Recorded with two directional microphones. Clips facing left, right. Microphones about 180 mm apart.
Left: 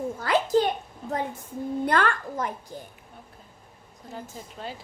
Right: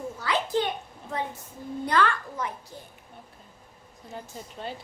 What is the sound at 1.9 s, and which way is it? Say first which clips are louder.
Speech: right 1 dB; 50° left (ahead or behind).